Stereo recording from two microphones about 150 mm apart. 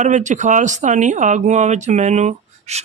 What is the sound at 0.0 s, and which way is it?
Speech, 55° right (ahead or behind).